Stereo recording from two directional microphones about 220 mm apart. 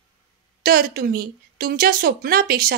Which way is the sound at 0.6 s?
40° right (ahead or behind).